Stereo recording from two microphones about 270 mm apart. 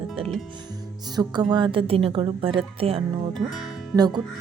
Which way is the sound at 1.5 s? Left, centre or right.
Centre.